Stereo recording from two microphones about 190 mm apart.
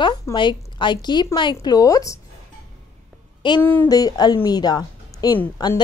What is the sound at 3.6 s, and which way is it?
A woman's voice, 15° left (ahead or behind).